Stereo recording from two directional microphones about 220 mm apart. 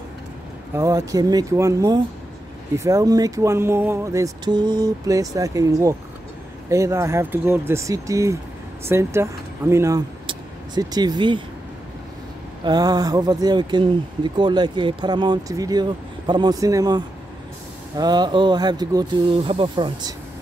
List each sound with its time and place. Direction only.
0.7 s speech: 15° right (ahead or behind)
12.6 s speech: 20° right (ahead or behind)